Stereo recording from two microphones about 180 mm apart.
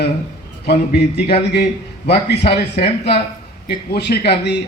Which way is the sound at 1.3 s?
65° left (ahead or behind).